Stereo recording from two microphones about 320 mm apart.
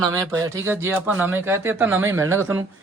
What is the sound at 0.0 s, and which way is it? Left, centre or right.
Speech, centre.